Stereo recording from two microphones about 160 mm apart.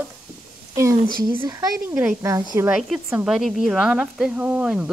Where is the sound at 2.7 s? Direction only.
5° right (ahead or behind).